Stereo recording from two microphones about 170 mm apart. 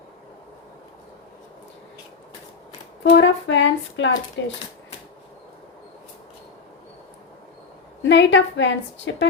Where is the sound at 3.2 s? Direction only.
90° left.